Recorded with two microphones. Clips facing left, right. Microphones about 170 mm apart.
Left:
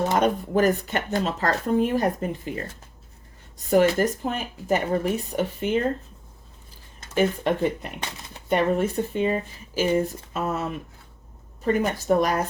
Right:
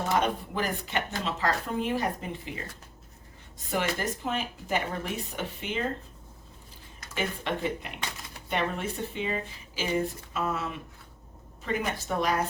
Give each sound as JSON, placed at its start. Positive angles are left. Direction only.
{"t": 0.2, "sound": "speech", "side_deg": 45}
{"t": 3.7, "sound": "speech", "side_deg": 40}
{"t": 7.1, "sound": "speech", "side_deg": 45}